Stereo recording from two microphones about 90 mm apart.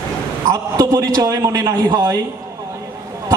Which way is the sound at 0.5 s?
40° right (ahead or behind).